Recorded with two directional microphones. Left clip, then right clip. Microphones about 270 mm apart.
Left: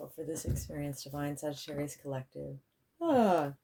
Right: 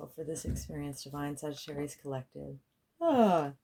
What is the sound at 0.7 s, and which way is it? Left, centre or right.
Speech, right.